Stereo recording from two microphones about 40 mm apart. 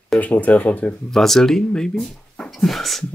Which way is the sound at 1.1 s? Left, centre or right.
Centre.